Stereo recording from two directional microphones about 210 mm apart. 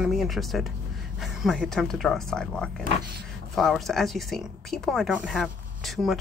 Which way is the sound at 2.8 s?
50° right (ahead or behind).